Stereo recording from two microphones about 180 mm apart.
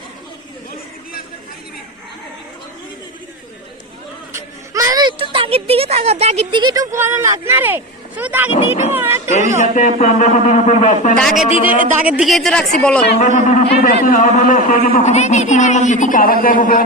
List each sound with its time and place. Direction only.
4.3 s a woman's voice: 15° right (ahead or behind)
9.6 s speech: 45° left (ahead or behind)
11.2 s speech: 5° left (ahead or behind)
11.7 s a man's voice: 45° right (ahead or behind)
12.0 s speech: 5° right (ahead or behind)
13.1 s speech: 45° left (ahead or behind)